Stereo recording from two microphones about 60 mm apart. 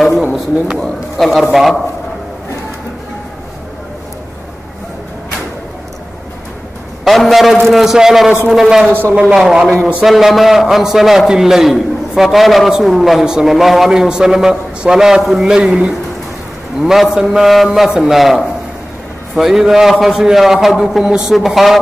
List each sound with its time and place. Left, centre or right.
0.2 s a man's voice: centre
0.7 s a man's voice: centre
7.1 s a man's voice: centre